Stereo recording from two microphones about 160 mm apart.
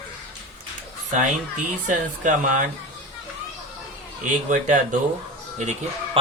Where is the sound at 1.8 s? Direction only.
55° right (ahead or behind).